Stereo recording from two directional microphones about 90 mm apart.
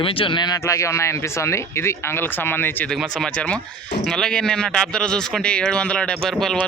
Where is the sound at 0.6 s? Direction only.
35° left (ahead or behind).